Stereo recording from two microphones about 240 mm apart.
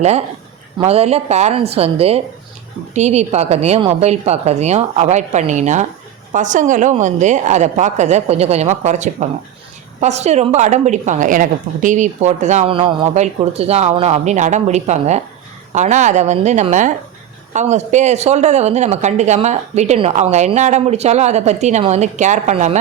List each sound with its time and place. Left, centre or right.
0.8 s speech: right